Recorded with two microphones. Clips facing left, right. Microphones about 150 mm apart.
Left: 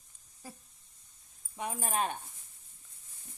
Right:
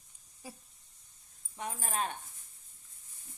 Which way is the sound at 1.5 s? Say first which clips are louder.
Left 3 dB; 15° left (ahead or behind).